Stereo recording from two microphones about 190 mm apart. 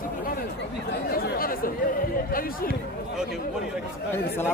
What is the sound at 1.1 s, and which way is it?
Speech, 50° left (ahead or behind).